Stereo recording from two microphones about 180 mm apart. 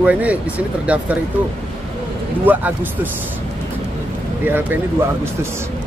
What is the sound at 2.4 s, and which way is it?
Speech, 10° right (ahead or behind).